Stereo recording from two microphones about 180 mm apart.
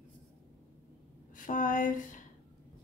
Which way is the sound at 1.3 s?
50° left (ahead or behind).